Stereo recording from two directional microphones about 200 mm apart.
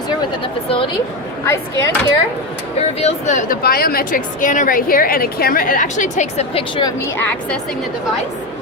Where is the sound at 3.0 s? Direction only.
35° left (ahead or behind).